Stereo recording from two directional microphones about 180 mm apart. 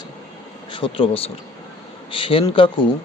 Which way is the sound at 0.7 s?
30° left (ahead or behind).